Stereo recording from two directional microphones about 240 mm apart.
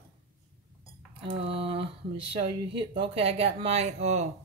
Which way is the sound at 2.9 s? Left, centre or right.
Right.